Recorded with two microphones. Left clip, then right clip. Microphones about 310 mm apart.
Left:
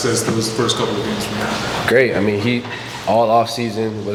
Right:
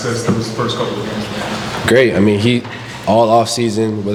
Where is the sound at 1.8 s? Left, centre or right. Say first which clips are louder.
Right 4 dB; right.